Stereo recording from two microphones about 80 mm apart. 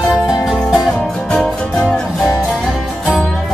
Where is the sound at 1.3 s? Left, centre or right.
Centre.